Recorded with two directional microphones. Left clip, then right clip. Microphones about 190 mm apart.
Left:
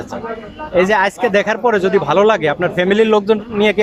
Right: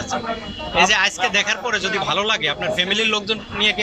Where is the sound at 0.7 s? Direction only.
45° left (ahead or behind).